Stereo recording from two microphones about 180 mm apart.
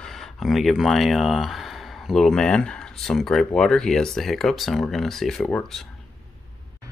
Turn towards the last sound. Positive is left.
turn(degrees=5)  # may be behind; listen again after turning